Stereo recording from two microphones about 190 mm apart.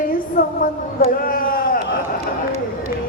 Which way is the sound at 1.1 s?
50° left (ahead or behind).